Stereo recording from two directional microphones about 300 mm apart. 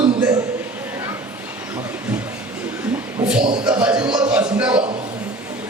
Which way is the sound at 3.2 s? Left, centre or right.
Centre.